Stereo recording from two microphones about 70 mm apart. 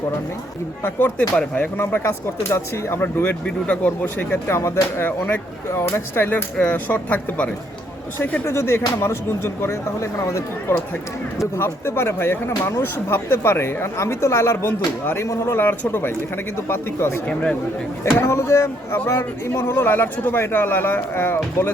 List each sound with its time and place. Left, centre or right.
0.9 s speech: left
3.4 s speech: centre
8.2 s speech: left